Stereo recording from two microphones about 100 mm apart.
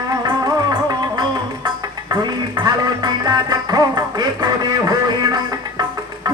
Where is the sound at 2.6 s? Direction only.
45° right (ahead or behind).